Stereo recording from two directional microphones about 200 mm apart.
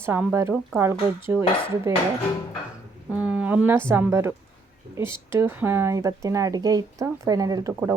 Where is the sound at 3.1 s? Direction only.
5° right (ahead or behind).